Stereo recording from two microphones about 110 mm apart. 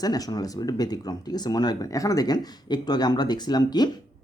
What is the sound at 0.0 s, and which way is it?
Speech, 35° left (ahead or behind).